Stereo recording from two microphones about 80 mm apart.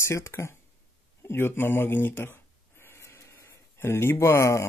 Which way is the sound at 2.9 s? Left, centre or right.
Left.